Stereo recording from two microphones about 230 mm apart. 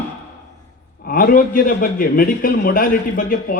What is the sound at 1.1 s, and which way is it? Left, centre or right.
A man's voice, left.